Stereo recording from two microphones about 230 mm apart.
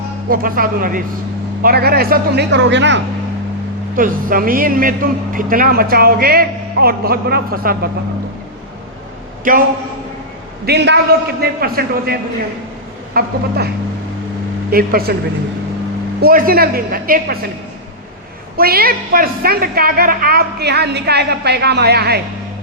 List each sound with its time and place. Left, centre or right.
0.3 s a man's voice: right
3.9 s a man's voice: right
9.4 s a man's voice: right
10.7 s a woman's voice: right
13.2 s a man's voice: right
14.7 s a man's voice: right
16.2 s a man's voice: right
18.5 s a woman's voice: right